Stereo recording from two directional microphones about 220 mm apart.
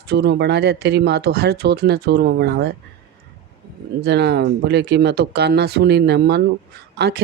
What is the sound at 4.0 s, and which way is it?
Speech, 50° right (ahead or behind).